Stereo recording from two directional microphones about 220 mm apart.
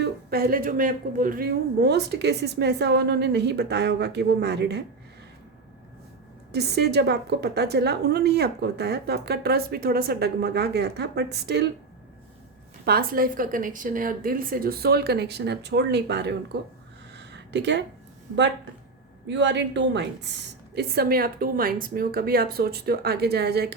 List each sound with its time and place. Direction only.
0.0 s a woman's voice: 45° right (ahead or behind)
6.5 s a woman's voice: 50° right (ahead or behind)
12.8 s a woman's voice: 45° right (ahead or behind)
17.2 s a sound: 50° right (ahead or behind)
18.3 s a woman's voice: 55° right (ahead or behind)